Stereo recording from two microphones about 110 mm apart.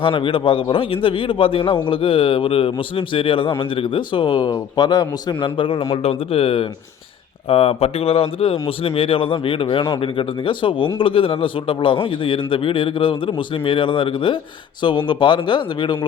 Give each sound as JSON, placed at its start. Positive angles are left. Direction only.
{"t": 0.0, "sound": "a man's voice", "side_deg": 50}
{"t": 5.9, "sound": "a man's voice", "side_deg": 65}